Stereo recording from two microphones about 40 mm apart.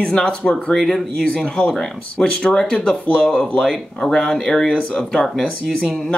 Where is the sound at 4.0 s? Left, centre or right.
Centre.